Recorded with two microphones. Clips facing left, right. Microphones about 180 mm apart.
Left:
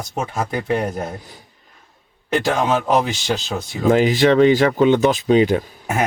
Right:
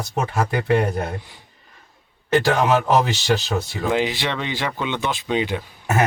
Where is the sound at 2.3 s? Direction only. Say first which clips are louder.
Right 1 dB; 15° left (ahead or behind).